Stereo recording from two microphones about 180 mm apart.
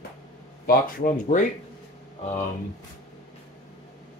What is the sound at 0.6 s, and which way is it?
Speech, 45° left (ahead or behind).